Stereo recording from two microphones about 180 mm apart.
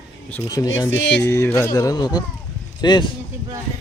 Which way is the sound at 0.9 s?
85° left.